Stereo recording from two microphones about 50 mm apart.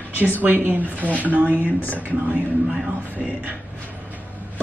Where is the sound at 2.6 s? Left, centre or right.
Centre.